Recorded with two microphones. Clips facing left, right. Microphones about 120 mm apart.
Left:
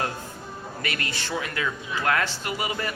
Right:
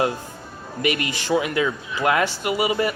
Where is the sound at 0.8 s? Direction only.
15° right (ahead or behind).